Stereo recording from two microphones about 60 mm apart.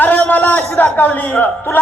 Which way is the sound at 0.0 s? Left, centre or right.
Left.